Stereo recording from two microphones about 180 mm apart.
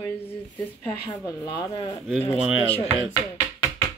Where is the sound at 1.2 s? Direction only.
20° left (ahead or behind).